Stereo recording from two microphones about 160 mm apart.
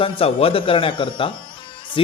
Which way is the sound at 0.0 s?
40° left (ahead or behind).